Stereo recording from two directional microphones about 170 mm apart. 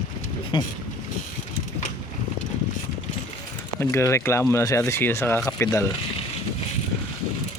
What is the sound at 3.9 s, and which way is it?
Speech, 15° left (ahead or behind).